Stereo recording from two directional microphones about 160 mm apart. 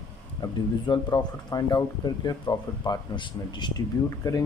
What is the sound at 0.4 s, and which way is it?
Speech, 25° left (ahead or behind).